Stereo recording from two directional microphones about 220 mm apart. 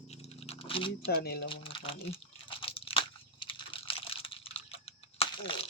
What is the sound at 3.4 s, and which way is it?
Computer keyboard, 25° left (ahead or behind).